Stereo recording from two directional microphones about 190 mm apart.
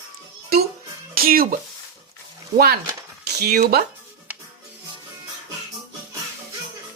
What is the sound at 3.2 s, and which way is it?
Speech, 60° right (ahead or behind).